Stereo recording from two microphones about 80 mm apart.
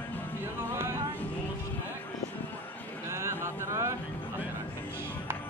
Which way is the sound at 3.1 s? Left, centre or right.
Right.